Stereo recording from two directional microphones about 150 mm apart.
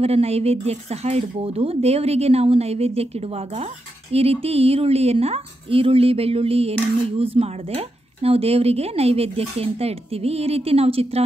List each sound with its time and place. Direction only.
0.0 s speech: 45° right (ahead or behind)